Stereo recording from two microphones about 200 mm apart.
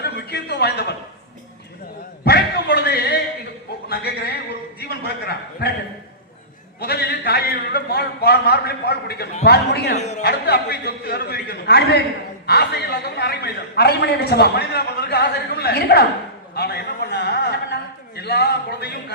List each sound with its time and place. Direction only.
0.0 s a sound: 55° left (ahead or behind)
2.2 s a sound: 55° left (ahead or behind)
4.8 s a man's voice: 50° left (ahead or behind)
6.7 s a man's voice: 55° left (ahead or behind)
10.0 s speech: 35° left (ahead or behind)
10.2 s a man's voice: 55° left (ahead or behind)